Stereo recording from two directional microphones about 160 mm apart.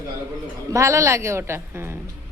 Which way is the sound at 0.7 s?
20° right (ahead or behind).